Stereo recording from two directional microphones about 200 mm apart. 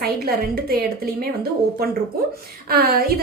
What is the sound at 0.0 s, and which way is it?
A woman's voice, 50° right (ahead or behind).